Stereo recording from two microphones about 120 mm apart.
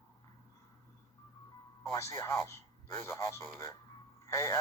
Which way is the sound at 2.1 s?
25° left (ahead or behind).